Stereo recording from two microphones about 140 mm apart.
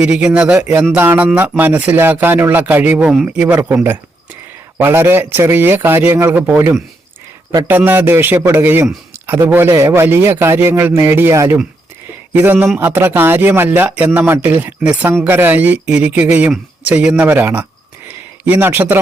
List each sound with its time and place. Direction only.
0.0 s speech: 5° right (ahead or behind)
4.8 s speech: 15° right (ahead or behind)